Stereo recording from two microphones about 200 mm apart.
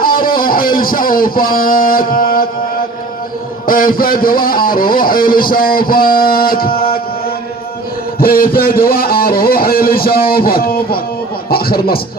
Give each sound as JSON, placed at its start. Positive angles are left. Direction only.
{"t": 0.0, "sound": "music", "side_deg": 45}
{"t": 3.7, "sound": "a man's voice", "side_deg": 45}
{"t": 8.2, "sound": "a man's voice", "side_deg": 50}